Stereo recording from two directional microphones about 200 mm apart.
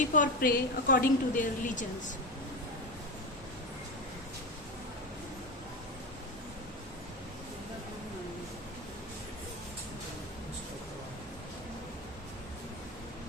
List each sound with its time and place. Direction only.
0.0 s a woman's voice: 40° left (ahead or behind)